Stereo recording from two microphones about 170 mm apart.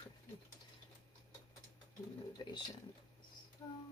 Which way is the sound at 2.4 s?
25° left (ahead or behind).